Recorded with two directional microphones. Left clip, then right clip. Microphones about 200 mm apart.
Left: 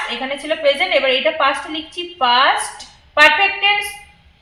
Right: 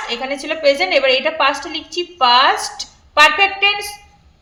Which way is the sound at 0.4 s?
65° right (ahead or behind).